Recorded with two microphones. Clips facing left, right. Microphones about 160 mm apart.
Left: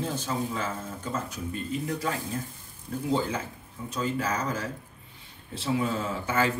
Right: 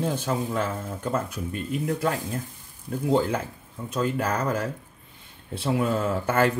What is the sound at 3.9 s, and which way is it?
Speech, 55° right (ahead or behind).